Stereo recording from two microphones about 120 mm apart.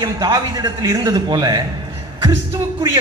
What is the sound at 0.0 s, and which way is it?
A man's voice, 35° right (ahead or behind).